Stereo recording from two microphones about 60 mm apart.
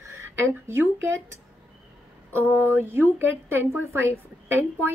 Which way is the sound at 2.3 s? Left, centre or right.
Right.